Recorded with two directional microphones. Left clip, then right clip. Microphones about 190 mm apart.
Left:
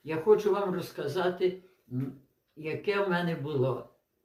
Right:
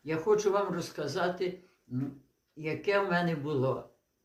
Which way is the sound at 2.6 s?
20° right (ahead or behind).